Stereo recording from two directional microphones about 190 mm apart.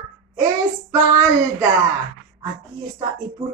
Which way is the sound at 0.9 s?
15° right (ahead or behind).